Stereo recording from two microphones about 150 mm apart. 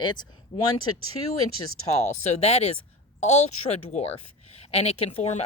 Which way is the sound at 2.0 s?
45° left (ahead or behind).